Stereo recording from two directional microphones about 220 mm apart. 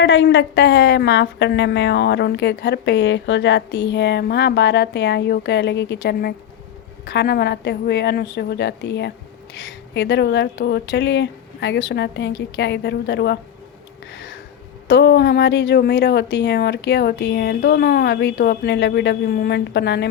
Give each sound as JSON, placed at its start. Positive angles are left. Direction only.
{"t": 0.0, "sound": "a woman's voice", "side_deg": 55}
{"t": 14.1, "sound": "a sound", "side_deg": 55}
{"t": 14.8, "sound": "a woman's voice", "side_deg": 50}